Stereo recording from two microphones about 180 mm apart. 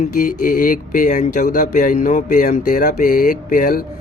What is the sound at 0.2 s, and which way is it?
Speech, 50° left (ahead or behind).